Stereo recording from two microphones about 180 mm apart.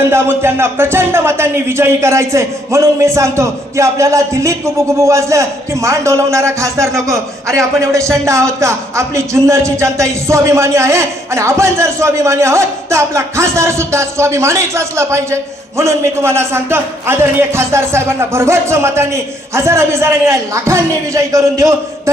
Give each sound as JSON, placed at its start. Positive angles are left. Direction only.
{"t": 0.0, "sound": "speech", "side_deg": -15}